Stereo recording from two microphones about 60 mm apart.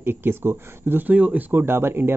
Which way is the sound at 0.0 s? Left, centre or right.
Right.